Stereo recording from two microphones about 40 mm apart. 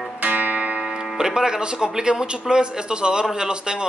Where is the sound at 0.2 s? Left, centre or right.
Right.